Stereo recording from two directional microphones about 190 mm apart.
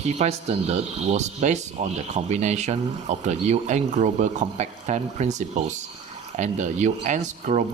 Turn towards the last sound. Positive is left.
turn(degrees=-40)  # may be behind; listen again after turning